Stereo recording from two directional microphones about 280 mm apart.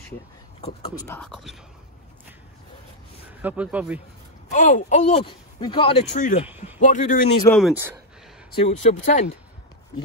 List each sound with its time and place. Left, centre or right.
0.6 s speech: left
1.0 s speech: centre
3.4 s speech: centre
4.5 s speech: left
6.4 s speech: centre
6.8 s speech: left
7.4 s speech: centre
8.5 s speech: left